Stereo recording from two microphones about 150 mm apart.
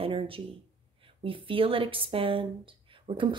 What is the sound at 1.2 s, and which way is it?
Speech, 35° right (ahead or behind).